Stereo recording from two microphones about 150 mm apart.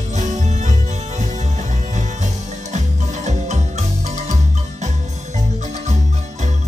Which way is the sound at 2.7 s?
50° right (ahead or behind).